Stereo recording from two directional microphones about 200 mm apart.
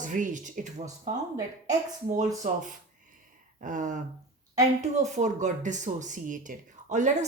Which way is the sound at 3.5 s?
40° right (ahead or behind).